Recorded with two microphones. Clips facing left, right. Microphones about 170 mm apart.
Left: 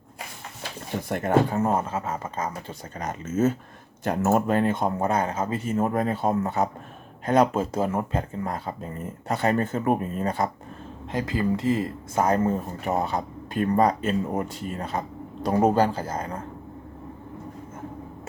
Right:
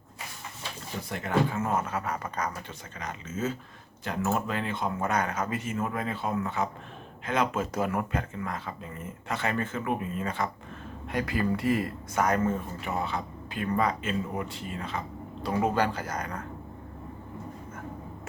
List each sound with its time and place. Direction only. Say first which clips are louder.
1.0 s speech: left 6 dB; 50° left (ahead or behind); by 2.7 s 25° left (ahead or behind)
3.0 s speech: left 9 dB; 45° left (ahead or behind)
11.1 s speech: left 3 dB; 25° left (ahead or behind)